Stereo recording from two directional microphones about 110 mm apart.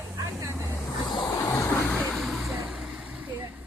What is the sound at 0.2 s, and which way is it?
Vehicle, 30° right (ahead or behind).